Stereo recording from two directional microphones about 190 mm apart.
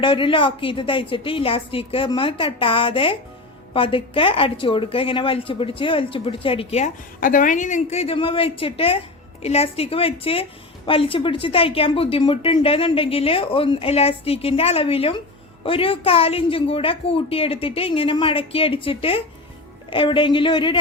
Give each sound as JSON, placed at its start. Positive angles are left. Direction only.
{"t": 0.0, "sound": "a woman's voice", "side_deg": 25}